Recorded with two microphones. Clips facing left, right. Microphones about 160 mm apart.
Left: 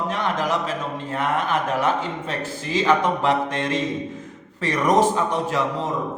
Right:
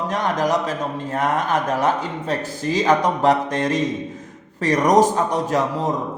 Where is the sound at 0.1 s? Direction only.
40° right (ahead or behind).